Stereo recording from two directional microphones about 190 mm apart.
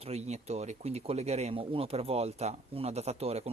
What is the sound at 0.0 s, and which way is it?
Speech, 35° right (ahead or behind).